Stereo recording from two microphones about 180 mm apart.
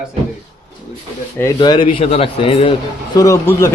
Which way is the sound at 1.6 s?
25° left (ahead or behind).